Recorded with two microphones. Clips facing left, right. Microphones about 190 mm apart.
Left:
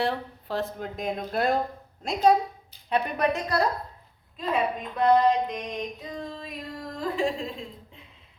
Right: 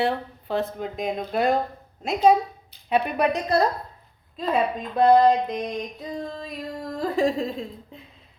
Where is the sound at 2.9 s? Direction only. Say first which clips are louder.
Right 3 dB; 10° right (ahead or behind).